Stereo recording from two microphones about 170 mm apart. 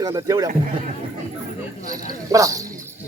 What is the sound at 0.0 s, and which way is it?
Speech, 20° right (ahead or behind).